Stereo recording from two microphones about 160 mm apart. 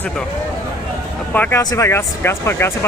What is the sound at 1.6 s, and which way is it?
Speech, 20° left (ahead or behind).